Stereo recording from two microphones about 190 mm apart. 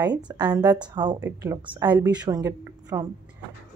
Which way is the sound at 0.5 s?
10° right (ahead or behind).